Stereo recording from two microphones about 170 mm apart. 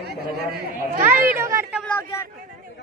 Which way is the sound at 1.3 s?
15° right (ahead or behind).